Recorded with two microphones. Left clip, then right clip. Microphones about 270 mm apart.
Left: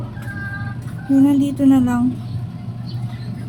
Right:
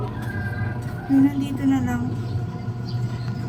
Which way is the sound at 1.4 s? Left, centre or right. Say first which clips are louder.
Left 8 dB; centre.